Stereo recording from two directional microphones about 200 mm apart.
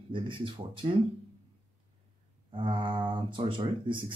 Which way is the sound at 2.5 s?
25° right (ahead or behind).